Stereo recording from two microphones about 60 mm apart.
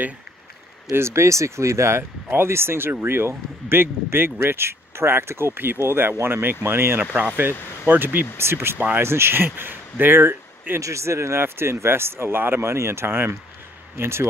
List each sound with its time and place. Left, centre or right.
0.9 s speech: right
7.0 s speech: right
10.8 s speech: right